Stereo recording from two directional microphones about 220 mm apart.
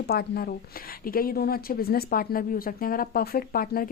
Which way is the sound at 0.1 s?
45° left (ahead or behind).